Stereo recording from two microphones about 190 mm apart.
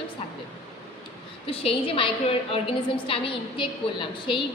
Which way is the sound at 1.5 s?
30° left (ahead or behind).